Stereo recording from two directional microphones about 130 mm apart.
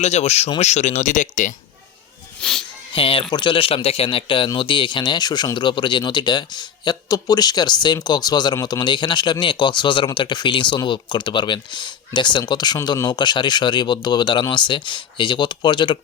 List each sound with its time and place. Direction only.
0.0 s speech: 55° left (ahead or behind)
2.4 s speech: 5° left (ahead or behind)
2.9 s a man's voice: 45° left (ahead or behind)